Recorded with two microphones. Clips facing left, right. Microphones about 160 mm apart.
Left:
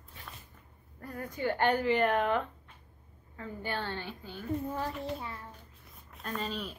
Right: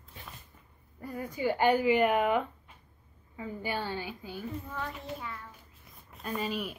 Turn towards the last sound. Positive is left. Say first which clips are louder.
# right 3 dB
turn(degrees=-10)  # may be behind; listen again after turning